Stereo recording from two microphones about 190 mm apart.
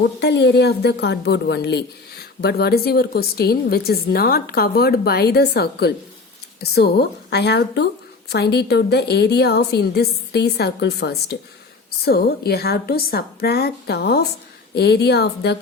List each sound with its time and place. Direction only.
0.2 s a woman's voice: 60° left (ahead or behind)